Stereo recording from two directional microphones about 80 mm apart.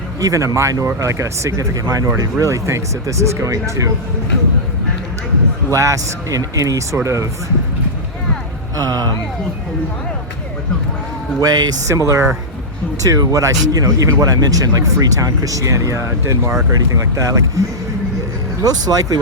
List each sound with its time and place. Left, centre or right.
0.2 s speech: right
5.7 s speech: right
8.7 s speech: right
11.3 s speech: right
16.9 s speech: right
18.6 s speech: right